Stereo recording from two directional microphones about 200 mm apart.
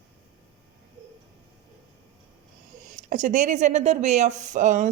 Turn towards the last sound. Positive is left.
turn(degrees=-40)  # may be behind; listen again after turning